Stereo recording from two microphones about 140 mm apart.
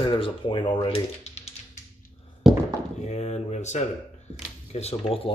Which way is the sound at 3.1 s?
50° left (ahead or behind).